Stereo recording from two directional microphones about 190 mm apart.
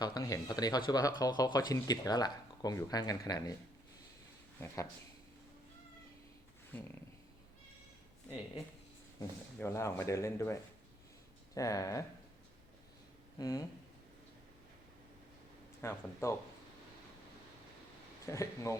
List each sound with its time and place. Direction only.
0.0 s speech: 20° left (ahead or behind)
4.6 s speech: 15° left (ahead or behind)
9.6 s speech: 15° left (ahead or behind)
13.4 s speech: 15° left (ahead or behind)
15.8 s speech: 15° left (ahead or behind)
18.3 s speech: 15° left (ahead or behind)